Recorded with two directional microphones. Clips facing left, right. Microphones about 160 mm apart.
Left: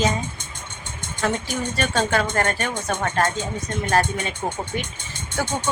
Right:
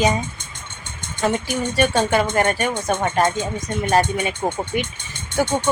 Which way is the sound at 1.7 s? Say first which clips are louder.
Right 4 dB; 15° right (ahead or behind).